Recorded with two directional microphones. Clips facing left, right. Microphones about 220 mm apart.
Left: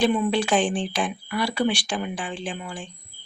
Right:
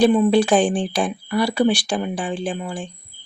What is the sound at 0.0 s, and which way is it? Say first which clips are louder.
Speech: right 7 dB; 35° right (ahead or behind).